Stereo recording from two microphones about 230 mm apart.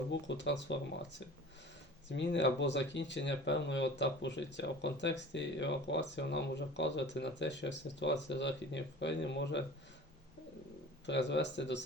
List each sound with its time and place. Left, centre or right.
0.1 s speech: left
2.0 s speech: left
11.0 s speech: left